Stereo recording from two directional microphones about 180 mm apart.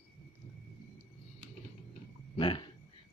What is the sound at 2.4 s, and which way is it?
Speech, 25° left (ahead or behind).